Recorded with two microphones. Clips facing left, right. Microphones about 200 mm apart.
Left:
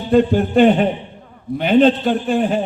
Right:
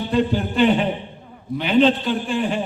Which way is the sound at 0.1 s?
50° left (ahead or behind).